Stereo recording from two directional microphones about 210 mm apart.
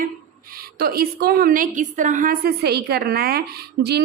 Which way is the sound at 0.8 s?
45° right (ahead or behind).